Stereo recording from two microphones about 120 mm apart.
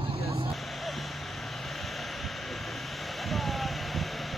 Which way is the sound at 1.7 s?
Centre (ahead or behind).